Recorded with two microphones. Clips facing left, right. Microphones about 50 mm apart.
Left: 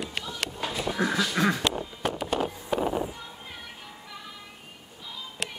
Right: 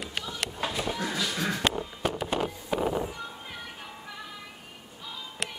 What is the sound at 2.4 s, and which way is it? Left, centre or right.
Vehicle, centre.